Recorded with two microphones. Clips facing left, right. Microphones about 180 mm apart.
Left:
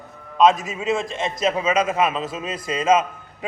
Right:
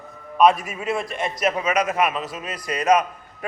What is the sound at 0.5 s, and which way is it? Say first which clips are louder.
A man's voice: left 2 dB; 25° left (ahead or behind).